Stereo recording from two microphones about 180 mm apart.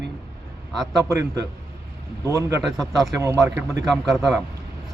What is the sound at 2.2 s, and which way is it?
Speech, 20° right (ahead or behind).